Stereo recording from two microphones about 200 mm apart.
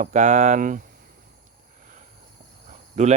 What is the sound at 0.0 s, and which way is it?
Speech, 35° right (ahead or behind).